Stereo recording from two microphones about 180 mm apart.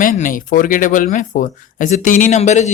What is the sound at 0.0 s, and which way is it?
Speech, 50° left (ahead or behind).